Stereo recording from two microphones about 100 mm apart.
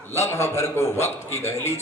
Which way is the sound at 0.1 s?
25° left (ahead or behind).